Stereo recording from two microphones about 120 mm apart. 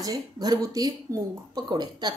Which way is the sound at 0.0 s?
35° right (ahead or behind).